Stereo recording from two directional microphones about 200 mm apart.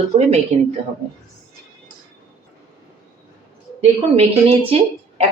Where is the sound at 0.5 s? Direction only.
35° right (ahead or behind).